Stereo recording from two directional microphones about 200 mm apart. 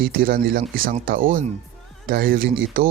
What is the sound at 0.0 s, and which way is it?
Speech, 45° right (ahead or behind).